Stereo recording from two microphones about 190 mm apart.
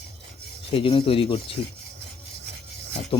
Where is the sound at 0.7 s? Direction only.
30° left (ahead or behind).